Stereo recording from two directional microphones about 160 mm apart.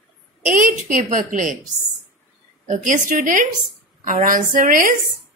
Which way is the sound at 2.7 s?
55° right (ahead or behind).